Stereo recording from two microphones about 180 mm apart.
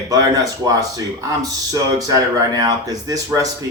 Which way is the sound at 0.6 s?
20° right (ahead or behind).